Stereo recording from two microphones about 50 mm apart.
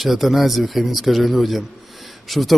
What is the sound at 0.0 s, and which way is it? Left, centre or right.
Speech, centre.